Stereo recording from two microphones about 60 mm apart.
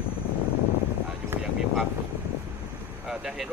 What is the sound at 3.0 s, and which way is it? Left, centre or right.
Speech, centre.